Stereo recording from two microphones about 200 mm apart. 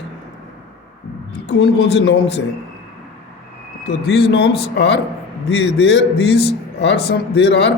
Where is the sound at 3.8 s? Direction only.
50° left (ahead or behind).